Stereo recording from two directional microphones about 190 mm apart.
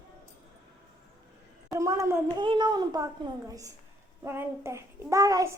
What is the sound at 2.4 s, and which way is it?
A child's voice, 25° right (ahead or behind).